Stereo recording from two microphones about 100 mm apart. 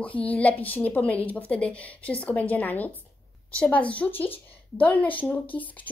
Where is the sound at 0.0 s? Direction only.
15° left (ahead or behind).